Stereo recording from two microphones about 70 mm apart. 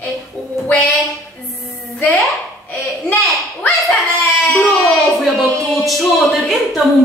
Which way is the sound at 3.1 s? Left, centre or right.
Left.